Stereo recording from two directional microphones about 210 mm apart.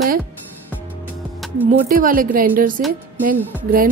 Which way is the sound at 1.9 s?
40° right (ahead or behind).